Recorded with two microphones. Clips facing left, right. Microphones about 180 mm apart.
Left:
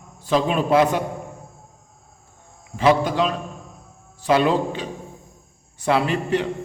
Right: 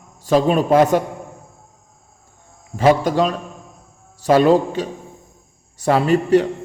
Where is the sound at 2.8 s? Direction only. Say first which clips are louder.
Right 3 dB; 45° right (ahead or behind).